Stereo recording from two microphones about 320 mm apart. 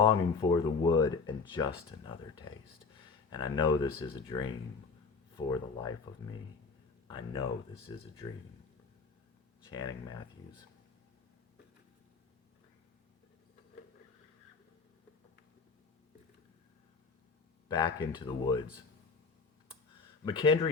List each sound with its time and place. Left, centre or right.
0.0 s speech: centre
7.1 s speech: centre
9.6 s speech: centre
17.7 s speech: centre
20.2 s speech: centre